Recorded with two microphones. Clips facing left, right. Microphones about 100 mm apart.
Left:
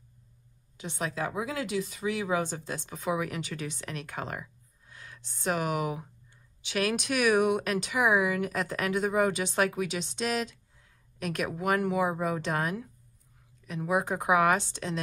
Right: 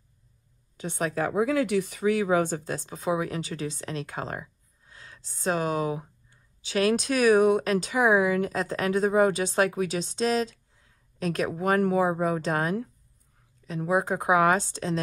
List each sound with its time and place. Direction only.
0.7 s speech: 45° right (ahead or behind)